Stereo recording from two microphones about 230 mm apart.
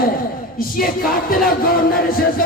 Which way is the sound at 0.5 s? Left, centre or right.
Left.